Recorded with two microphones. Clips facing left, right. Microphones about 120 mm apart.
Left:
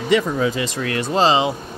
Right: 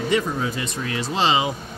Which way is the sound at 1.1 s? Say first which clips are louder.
Left 5 dB; 35° left (ahead or behind).